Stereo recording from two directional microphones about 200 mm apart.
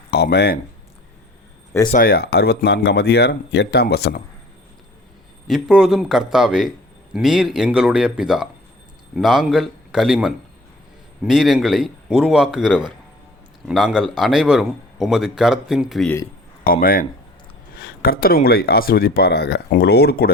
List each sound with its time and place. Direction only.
0.1 s speech: 55° left (ahead or behind)
1.9 s speech: 45° left (ahead or behind)
5.5 s a man's voice: centre (ahead or behind)
16.6 s speech: 45° left (ahead or behind)